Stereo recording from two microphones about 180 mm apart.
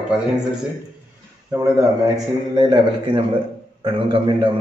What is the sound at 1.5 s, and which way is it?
A man's voice, 20° right (ahead or behind).